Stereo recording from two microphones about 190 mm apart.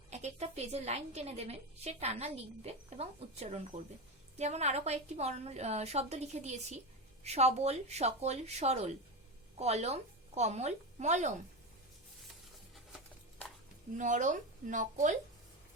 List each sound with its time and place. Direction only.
0.1 s a woman's voice: 35° right (ahead or behind)
14.0 s a woman's voice: 40° right (ahead or behind)